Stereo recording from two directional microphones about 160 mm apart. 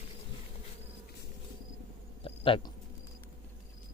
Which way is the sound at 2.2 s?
35° left (ahead or behind).